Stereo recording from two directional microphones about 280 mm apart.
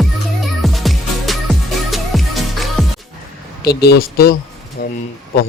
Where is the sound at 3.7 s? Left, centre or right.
Left.